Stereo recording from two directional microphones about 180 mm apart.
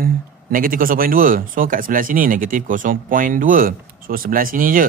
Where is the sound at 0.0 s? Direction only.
50° right (ahead or behind).